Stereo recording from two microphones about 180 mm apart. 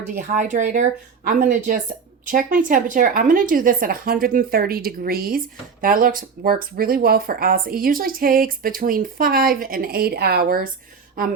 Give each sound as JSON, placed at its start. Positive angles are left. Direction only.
{"t": 0.1, "sound": "speech", "side_deg": -45}